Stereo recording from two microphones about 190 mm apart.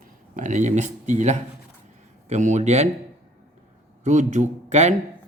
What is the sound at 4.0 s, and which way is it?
Speech, 40° right (ahead or behind).